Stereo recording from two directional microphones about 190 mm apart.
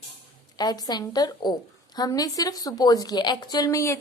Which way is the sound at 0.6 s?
20° left (ahead or behind).